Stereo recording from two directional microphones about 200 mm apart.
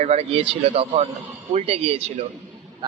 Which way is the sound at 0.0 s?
30° right (ahead or behind).